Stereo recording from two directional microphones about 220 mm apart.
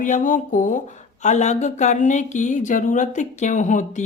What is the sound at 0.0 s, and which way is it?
A woman's voice, 35° left (ahead or behind).